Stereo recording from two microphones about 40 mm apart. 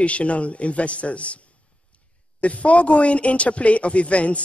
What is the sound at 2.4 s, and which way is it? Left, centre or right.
Speech, left.